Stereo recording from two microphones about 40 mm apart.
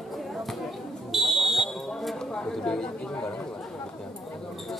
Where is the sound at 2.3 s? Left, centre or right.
Centre.